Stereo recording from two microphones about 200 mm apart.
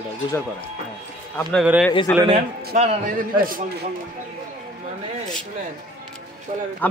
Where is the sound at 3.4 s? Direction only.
45° right (ahead or behind).